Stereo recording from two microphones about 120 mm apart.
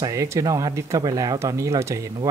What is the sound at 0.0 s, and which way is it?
A man's voice, 25° right (ahead or behind).